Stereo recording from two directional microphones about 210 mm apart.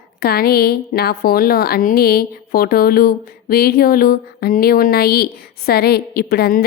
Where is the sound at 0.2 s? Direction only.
45° left (ahead or behind).